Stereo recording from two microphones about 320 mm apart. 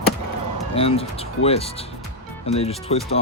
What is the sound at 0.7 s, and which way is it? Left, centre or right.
Speech, centre.